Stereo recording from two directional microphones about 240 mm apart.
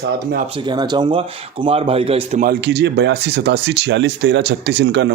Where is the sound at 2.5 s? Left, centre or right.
Right.